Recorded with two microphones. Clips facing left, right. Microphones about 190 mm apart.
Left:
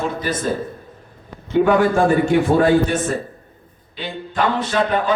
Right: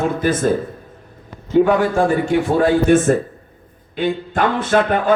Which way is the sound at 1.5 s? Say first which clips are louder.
Right 1 dB; 40° right (ahead or behind).